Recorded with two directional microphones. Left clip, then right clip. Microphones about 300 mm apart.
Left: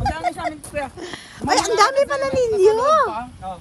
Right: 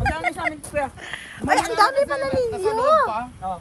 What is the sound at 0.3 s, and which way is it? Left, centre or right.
Speech, centre.